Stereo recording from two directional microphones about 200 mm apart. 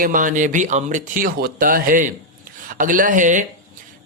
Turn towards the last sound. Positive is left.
turn(degrees=-40)  # may be behind; listen again after turning